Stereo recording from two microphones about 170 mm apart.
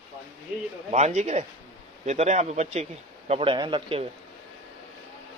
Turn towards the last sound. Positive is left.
turn(degrees=-30)  # may be behind; listen again after turning